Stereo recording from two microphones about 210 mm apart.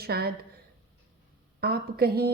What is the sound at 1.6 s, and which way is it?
Speech, 50° right (ahead or behind).